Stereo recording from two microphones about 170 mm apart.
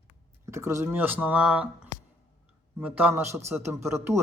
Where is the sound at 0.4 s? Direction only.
15° right (ahead or behind).